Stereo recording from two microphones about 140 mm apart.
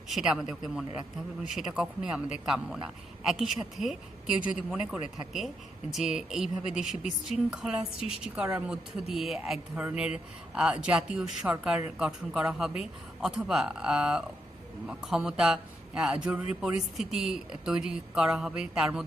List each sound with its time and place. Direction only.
0.1 s a man's voice: centre (ahead or behind)
1.5 s a man's voice: 5° right (ahead or behind)
7.9 s a woman's voice: 45° left (ahead or behind)
8.4 s a man's voice: 10° right (ahead or behind)